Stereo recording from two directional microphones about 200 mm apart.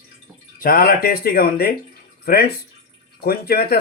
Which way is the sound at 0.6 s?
45° left (ahead or behind).